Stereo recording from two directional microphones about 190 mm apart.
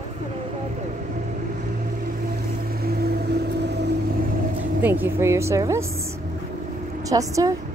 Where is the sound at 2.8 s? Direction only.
55° right (ahead or behind).